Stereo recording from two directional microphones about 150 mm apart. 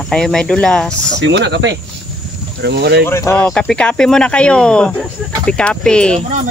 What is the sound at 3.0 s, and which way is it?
Speech, 15° left (ahead or behind).